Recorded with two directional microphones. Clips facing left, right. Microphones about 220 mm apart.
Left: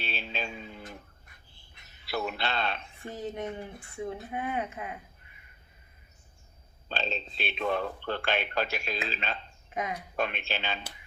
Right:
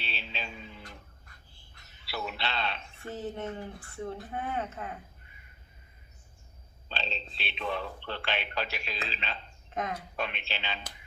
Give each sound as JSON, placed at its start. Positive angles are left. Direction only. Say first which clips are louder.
{"t": 0.0, "sound": "music", "louder": "left 4 dB", "side_deg": 50}
{"t": 2.0, "sound": "a sound", "louder": "left 4 dB", "side_deg": 50}
{"t": 3.0, "sound": "speech", "louder": "even", "side_deg": 15}
{"t": 6.8, "sound": "speech", "louder": "left 4 dB", "side_deg": 45}
{"t": 9.6, "sound": "speech", "louder": "even", "side_deg": 10}
{"t": 10.2, "sound": "speech", "louder": "left 7 dB", "side_deg": 50}